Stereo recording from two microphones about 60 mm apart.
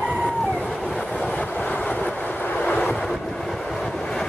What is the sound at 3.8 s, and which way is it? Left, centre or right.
Vehicle, centre.